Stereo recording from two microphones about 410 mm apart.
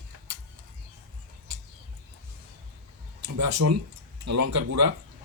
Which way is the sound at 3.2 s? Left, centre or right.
Right.